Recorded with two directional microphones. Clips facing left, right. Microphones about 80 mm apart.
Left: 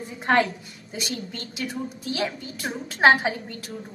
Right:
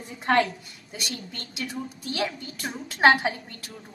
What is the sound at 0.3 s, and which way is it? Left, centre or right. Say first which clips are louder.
Speech: left 1 dB; left.